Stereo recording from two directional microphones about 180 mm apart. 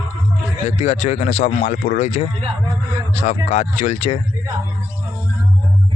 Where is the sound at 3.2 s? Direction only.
35° left (ahead or behind).